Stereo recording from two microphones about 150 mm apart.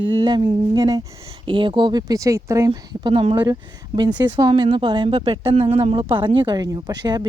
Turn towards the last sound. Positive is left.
turn(degrees=-30)  # may be behind; listen again after turning